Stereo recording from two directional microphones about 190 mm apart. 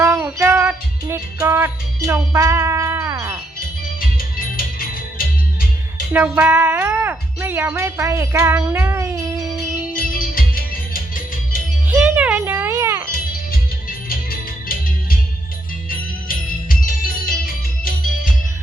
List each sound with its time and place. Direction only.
0.0 s music: 15° right (ahead or behind)
6.1 s speech: 10° right (ahead or behind)
9.9 s music: 50° left (ahead or behind)
11.9 s music: 10° right (ahead or behind)
14.3 s music: 50° left (ahead or behind)
16.3 s music: 50° left (ahead or behind)